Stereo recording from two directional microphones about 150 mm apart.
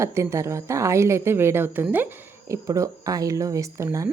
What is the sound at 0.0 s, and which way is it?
A woman's voice, 20° right (ahead or behind).